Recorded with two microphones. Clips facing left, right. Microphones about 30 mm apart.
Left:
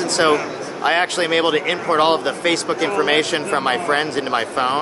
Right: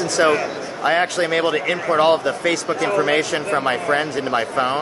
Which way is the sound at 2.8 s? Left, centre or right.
Left.